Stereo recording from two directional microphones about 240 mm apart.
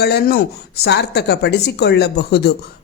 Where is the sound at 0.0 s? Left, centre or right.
Left.